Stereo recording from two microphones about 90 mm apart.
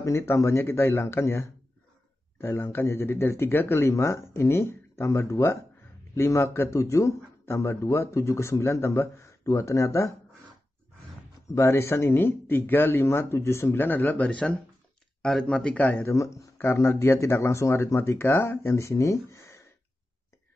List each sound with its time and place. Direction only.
0.0 s speech: 35° left (ahead or behind)
11.5 s a man's voice: 30° left (ahead or behind)
16.1 s speech: 35° left (ahead or behind)